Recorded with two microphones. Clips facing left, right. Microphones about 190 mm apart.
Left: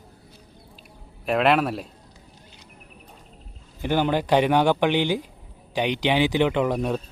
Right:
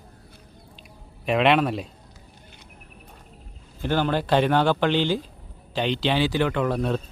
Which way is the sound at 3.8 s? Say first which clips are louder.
Left 1 dB; 15° left (ahead or behind).